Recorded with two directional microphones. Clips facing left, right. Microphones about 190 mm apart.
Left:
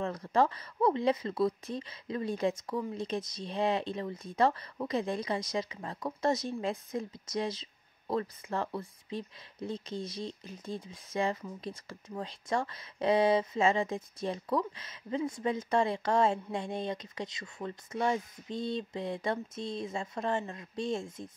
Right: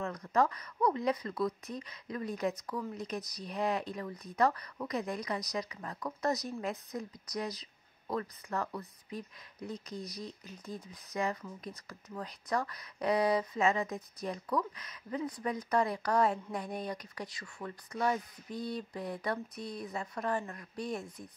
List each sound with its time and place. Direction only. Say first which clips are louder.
0.0 s speech: left 2 dB; 30° left (ahead or behind)